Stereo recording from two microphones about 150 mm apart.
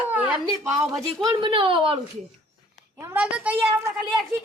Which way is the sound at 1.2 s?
35° right (ahead or behind).